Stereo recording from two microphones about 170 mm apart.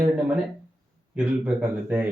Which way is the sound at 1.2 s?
10° right (ahead or behind).